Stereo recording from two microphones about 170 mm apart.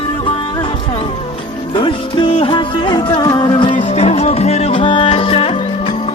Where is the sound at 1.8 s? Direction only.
30° left (ahead or behind).